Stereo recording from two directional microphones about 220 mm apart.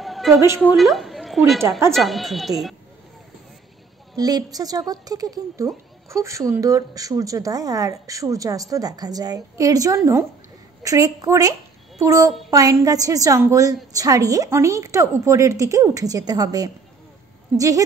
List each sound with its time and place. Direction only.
0.0 s a sound: centre (ahead or behind)
0.6 s a woman's voice: centre (ahead or behind)
4.2 s speech: 15° right (ahead or behind)